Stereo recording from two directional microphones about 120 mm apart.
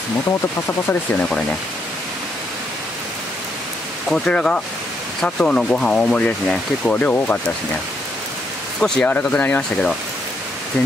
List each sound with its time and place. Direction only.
0.7 s speech: 20° left (ahead or behind)
4.1 s speech: 5° left (ahead or behind)
8.7 s speech: 5° left (ahead or behind)